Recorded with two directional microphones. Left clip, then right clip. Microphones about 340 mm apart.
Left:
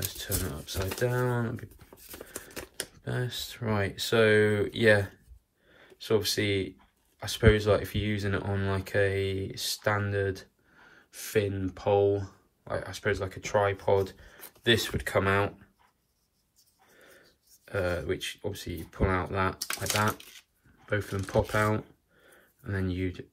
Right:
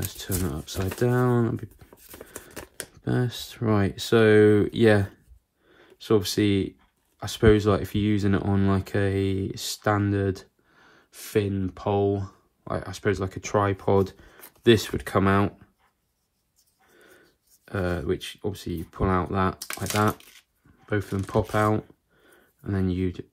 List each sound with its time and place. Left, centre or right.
0.0 s speech: centre
1.9 s shuffling cards: centre
3.1 s speech: centre
17.6 s speech: centre
22.3 s a sound: centre